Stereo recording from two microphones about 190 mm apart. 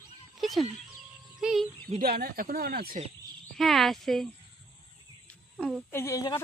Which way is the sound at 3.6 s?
Centre (ahead or behind).